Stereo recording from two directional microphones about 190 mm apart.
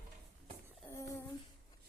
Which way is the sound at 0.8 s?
15° left (ahead or behind).